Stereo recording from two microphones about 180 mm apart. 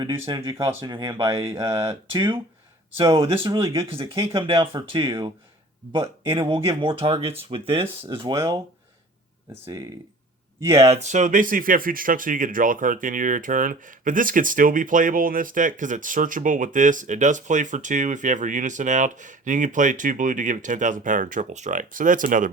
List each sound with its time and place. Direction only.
0.0 s speech: 25° right (ahead or behind)
3.9 s speech: 30° right (ahead or behind)
10.8 s speech: 35° right (ahead or behind)